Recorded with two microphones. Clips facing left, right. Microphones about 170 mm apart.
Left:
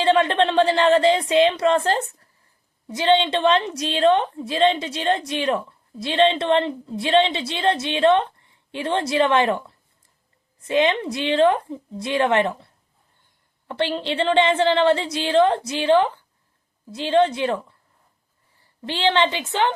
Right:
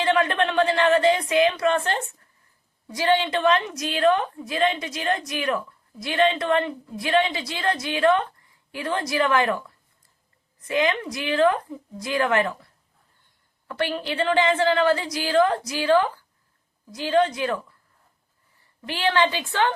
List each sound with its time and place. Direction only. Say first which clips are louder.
0.0 s a woman's voice: left 4 dB; 30° left (ahead or behind)
2.8 s a woman's voice: left 3 dB; 25° left (ahead or behind)